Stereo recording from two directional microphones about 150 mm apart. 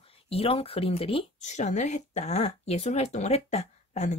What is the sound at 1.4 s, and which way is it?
Speech, 50° left (ahead or behind).